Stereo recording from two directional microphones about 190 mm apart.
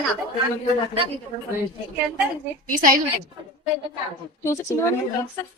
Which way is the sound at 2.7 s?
45° right (ahead or behind).